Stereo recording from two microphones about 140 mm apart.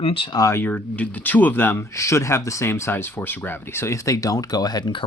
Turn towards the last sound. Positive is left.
turn(degrees=30)  # may be behind; listen again after turning